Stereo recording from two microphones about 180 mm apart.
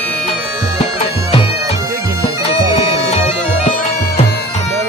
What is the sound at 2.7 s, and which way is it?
Bagpipes, 35° left (ahead or behind).